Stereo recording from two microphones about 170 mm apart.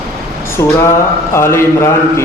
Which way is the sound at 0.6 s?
20° left (ahead or behind).